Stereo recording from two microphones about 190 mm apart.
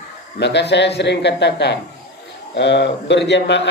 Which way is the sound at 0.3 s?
60° left (ahead or behind).